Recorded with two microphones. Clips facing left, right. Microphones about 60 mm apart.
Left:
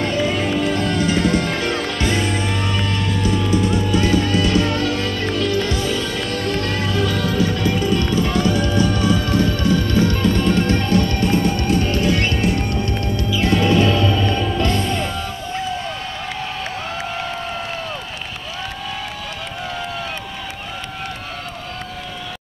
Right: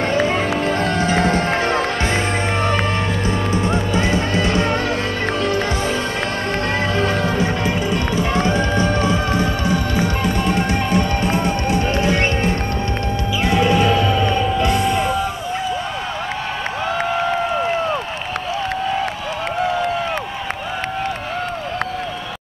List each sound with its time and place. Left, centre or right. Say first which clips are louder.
0.0 s music: right 2 dB; right; by 15.2 s centre